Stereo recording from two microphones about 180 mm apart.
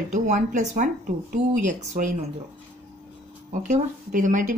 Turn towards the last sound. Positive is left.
turn(degrees=-45)  # may be behind; listen again after turning